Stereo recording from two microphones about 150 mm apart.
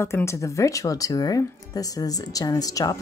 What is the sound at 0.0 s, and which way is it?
Speech, 15° left (ahead or behind).